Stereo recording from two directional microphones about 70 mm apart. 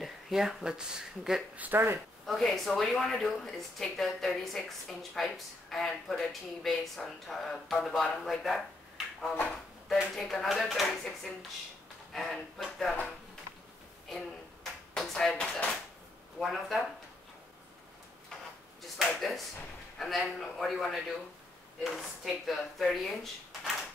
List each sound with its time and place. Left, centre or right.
0.0 s speech: centre
1.6 s speech: right
2.2 s speech: centre
12.1 s speech: centre
14.0 s a sound: centre
16.3 s speech: centre
18.8 s a sound: centre
20.0 s speech: centre